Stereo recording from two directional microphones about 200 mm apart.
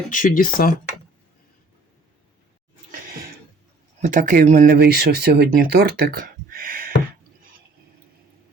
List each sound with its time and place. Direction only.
0.1 s speech: 45° left (ahead or behind)
4.0 s speech: 40° right (ahead or behind)